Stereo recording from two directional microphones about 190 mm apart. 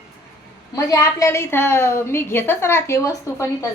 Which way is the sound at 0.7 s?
15° left (ahead or behind).